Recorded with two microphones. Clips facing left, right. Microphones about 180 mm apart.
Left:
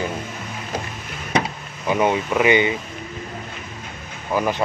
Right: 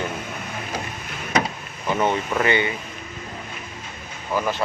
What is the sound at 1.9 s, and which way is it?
Speech, 10° left (ahead or behind).